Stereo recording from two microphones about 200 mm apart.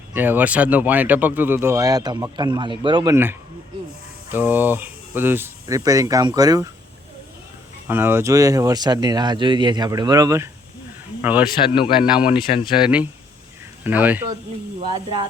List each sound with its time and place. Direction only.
0.1 s speech: 10° right (ahead or behind)
7.9 s speech: 10° right (ahead or behind)
11.5 s speech: 25° left (ahead or behind)
12.0 s speech: 5° right (ahead or behind)
14.9 s speech: 25° right (ahead or behind)